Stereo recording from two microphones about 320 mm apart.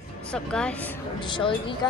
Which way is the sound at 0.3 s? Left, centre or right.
Centre.